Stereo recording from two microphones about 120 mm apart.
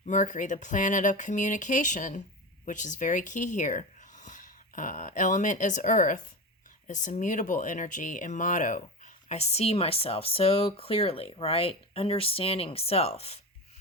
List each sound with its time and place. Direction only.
0.0 s speech: 90° left; by 13.4 s 55° left (ahead or behind)